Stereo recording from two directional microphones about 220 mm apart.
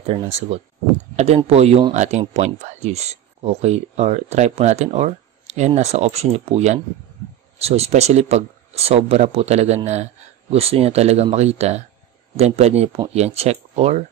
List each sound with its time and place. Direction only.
0.0 s speech: 30° right (ahead or behind)